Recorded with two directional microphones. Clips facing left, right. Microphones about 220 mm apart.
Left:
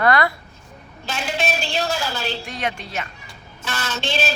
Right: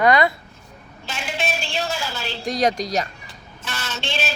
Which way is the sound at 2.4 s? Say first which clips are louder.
Right 7 dB; 40° right (ahead or behind).